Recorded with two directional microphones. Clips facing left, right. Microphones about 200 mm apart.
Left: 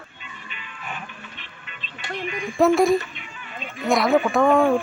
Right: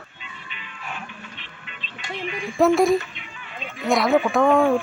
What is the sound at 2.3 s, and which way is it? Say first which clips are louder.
Speech: even; centre (ahead or behind).